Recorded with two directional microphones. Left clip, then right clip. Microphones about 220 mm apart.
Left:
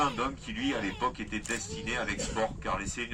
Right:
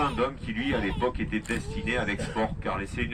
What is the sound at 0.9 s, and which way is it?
Speech, 35° left (ahead or behind).